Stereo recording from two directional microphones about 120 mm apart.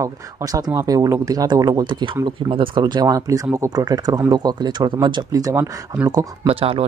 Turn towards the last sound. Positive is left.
turn(degrees=-50)  # may be behind; listen again after turning